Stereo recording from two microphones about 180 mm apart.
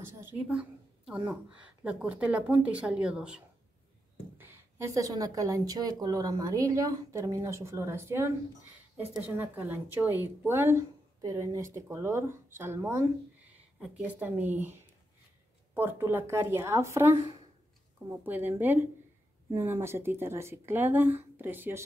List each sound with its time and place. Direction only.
0.2 s a woman's voice: 5° right (ahead or behind)
15.7 s a woman's voice: 10° right (ahead or behind)